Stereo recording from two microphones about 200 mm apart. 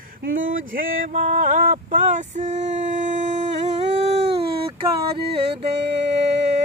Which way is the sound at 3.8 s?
55° right (ahead or behind).